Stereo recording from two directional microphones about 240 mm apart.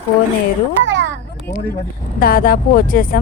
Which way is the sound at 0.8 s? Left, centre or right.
Right.